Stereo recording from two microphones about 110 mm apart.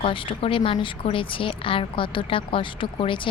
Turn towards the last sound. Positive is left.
turn(degrees=50)  # may be behind; listen again after turning